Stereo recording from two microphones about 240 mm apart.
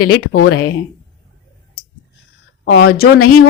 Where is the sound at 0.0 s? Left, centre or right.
Left.